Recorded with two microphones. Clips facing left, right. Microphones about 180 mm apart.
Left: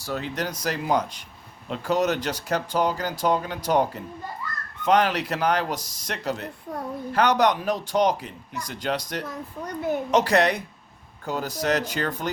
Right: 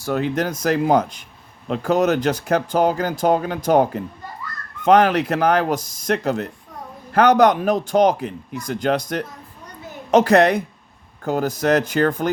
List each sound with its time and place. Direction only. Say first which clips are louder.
0.0 s speech: right 8 dB; 55° right (ahead or behind)
4.9 s speech: right 6 dB; 55° right (ahead or behind)